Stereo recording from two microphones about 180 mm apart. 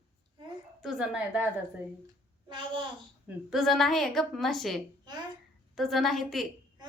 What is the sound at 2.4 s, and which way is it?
Speech, 25° right (ahead or behind).